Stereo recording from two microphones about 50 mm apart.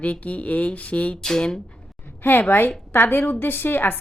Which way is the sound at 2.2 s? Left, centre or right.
Left.